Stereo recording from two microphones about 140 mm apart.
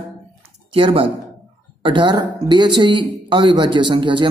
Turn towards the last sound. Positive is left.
turn(degrees=-35)  # may be behind; listen again after turning